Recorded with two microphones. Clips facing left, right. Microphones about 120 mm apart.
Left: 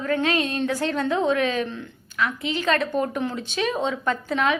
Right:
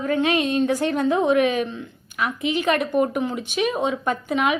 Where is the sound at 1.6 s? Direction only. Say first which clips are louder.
Right 1 dB; centre (ahead or behind).